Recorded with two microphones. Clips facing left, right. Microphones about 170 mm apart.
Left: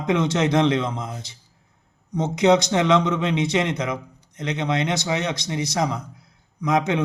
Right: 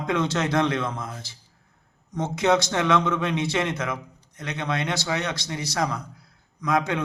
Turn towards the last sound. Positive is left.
turn(degrees=20)  # may be behind; listen again after turning